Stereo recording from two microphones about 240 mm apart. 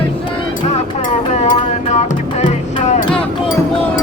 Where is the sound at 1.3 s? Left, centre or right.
Left.